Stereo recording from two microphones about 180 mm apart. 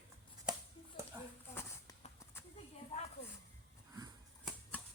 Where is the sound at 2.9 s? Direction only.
35° left (ahead or behind).